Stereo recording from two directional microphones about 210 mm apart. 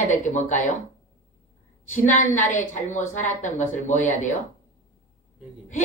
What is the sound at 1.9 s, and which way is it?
A woman's voice, 35° left (ahead or behind).